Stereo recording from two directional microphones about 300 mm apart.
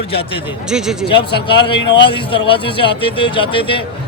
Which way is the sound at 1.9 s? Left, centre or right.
Centre.